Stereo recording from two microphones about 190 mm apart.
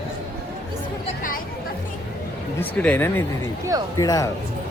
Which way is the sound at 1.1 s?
45° left (ahead or behind).